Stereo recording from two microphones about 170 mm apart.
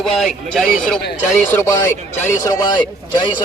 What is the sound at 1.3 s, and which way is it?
Speech, 15° left (ahead or behind).